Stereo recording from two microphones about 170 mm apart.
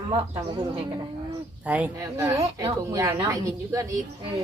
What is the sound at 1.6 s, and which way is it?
A woman's voice, 10° right (ahead or behind).